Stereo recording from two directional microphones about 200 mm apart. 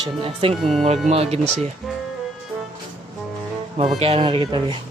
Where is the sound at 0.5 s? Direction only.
Centre (ahead or behind).